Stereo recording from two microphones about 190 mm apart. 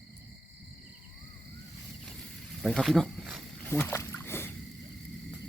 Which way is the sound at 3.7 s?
10° left (ahead or behind).